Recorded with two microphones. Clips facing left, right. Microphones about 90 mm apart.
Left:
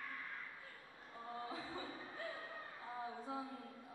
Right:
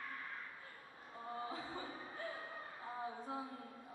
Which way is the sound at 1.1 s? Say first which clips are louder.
Right 2 dB; 5° right (ahead or behind).